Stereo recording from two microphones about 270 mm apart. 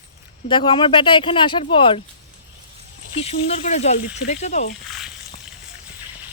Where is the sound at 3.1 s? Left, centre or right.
Left.